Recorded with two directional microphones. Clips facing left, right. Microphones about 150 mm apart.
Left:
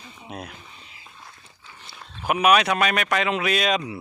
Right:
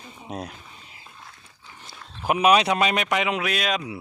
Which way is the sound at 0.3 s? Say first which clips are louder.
Right 3 dB; 35° right (ahead or behind).